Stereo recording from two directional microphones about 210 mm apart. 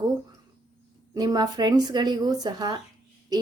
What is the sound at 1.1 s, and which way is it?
A woman's voice, 20° right (ahead or behind).